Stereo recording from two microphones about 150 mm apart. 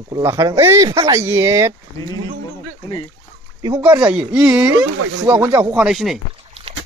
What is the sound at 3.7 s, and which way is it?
Speech, 10° right (ahead or behind).